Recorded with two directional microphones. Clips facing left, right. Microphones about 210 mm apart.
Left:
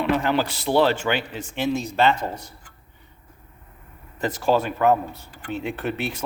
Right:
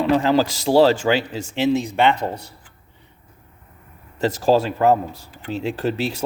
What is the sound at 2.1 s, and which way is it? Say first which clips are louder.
Speech: right 4 dB; 65° right (ahead or behind).